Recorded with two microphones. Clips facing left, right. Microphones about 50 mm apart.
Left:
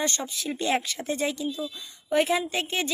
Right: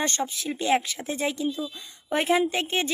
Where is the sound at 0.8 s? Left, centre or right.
Centre.